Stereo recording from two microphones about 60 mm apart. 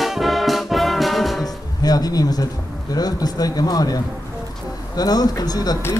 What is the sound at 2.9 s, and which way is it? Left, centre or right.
Speech, left.